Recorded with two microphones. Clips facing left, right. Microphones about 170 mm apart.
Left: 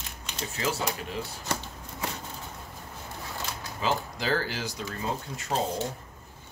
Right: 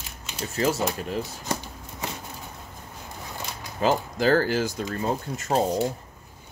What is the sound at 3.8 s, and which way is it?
Speech, 50° right (ahead or behind).